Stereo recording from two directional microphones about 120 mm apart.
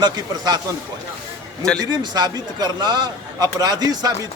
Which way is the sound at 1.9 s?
35° right (ahead or behind).